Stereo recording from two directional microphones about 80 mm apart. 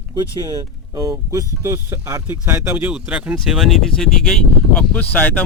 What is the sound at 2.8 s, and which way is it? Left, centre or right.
Speech, centre.